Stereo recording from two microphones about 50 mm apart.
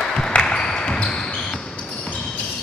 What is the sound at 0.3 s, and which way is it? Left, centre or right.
Basketball bounce, centre.